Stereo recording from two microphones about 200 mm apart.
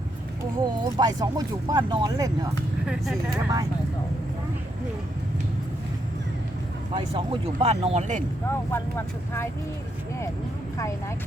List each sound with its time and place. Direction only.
0.6 s speech: 20° right (ahead or behind)
2.8 s speech: 5° right (ahead or behind)
6.9 s speech: 30° right (ahead or behind)
8.4 s speech: 10° left (ahead or behind)